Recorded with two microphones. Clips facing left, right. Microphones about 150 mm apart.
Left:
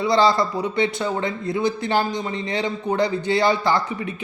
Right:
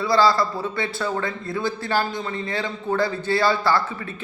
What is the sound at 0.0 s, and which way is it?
A man's voice, 20° left (ahead or behind).